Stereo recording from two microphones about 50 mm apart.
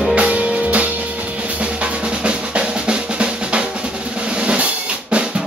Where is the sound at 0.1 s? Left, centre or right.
Right.